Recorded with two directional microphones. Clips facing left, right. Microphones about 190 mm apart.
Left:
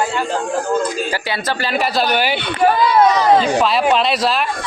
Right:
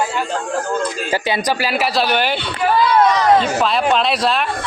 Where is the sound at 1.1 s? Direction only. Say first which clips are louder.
Right 3 dB; 20° right (ahead or behind).